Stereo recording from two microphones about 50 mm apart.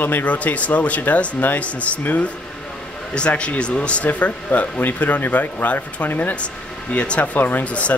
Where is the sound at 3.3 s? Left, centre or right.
Left.